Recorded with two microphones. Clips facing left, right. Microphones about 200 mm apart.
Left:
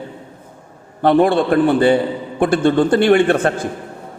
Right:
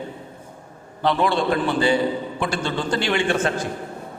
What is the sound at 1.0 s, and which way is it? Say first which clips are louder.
A man's voice: left 7 dB; 55° left (ahead or behind).